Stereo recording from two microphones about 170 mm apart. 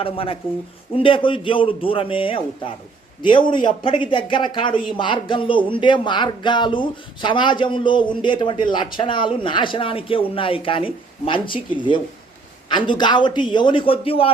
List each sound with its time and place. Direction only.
0.0 s speech: 35° left (ahead or behind)